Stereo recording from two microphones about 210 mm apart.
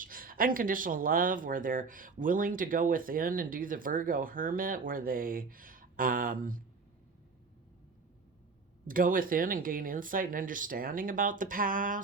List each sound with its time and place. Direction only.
0.0 s speech: 40° right (ahead or behind)
8.9 s speech: 40° right (ahead or behind)